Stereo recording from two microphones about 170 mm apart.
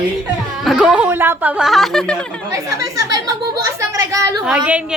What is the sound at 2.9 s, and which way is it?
A woman's voice, 20° right (ahead or behind).